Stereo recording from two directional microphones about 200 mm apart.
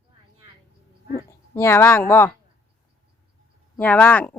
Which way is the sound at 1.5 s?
10° left (ahead or behind).